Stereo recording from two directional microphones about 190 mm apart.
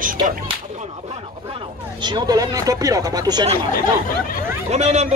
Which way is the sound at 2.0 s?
20° right (ahead or behind).